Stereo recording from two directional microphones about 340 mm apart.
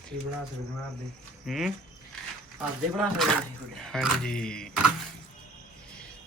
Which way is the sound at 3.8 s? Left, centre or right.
Centre.